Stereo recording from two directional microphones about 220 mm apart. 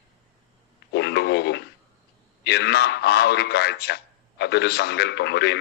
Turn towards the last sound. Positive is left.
turn(degrees=50)  # may be behind; listen again after turning